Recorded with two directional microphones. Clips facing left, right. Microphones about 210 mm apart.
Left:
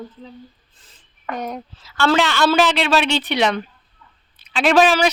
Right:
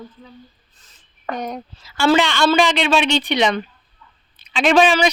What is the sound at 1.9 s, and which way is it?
Speech, 5° right (ahead or behind).